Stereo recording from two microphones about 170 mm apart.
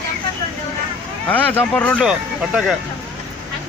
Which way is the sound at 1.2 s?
10° left (ahead or behind).